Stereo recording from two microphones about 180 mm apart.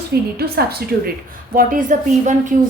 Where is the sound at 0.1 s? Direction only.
60° right (ahead or behind).